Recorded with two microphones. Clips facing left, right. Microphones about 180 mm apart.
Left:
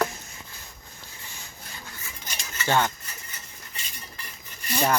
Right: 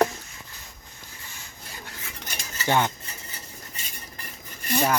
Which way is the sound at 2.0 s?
60° right (ahead or behind).